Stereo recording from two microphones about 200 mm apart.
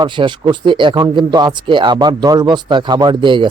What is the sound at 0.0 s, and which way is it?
Speech, 25° right (ahead or behind).